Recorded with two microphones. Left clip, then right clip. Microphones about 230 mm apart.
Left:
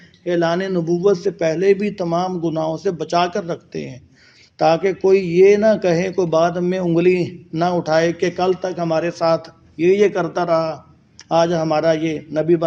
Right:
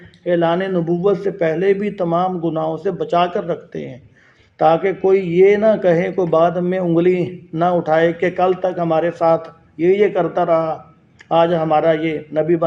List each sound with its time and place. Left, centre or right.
0.3 s a man's voice: left